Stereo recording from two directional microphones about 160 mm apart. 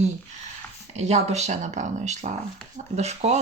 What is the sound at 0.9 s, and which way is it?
Speech, 45° right (ahead or behind).